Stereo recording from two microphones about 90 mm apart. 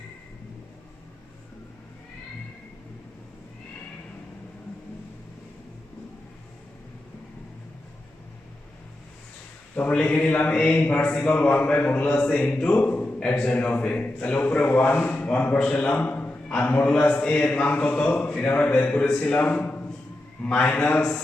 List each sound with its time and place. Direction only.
9.7 s a man's voice: 20° left (ahead or behind)